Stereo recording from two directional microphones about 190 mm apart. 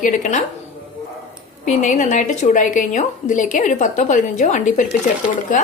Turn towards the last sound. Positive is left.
turn(degrees=40)  # may be behind; listen again after turning